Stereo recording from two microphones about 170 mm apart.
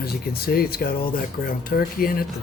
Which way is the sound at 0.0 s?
65° left (ahead or behind).